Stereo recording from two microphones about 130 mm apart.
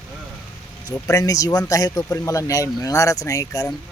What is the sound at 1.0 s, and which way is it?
Speech, 25° left (ahead or behind).